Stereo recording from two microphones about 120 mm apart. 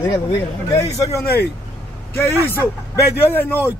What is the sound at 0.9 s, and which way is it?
Speech, 25° left (ahead or behind).